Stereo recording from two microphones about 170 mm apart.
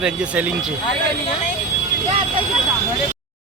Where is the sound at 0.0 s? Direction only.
10° right (ahead or behind).